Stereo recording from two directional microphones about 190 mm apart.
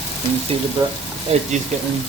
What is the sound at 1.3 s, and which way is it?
Speech, 35° right (ahead or behind).